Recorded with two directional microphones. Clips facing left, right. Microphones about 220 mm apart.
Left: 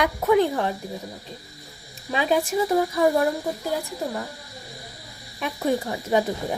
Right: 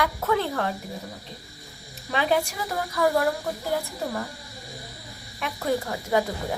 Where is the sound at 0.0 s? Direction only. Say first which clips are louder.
Left 5 dB; 15° left (ahead or behind).